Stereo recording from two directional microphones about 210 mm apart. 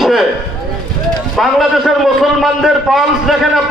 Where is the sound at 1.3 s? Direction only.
Centre (ahead or behind).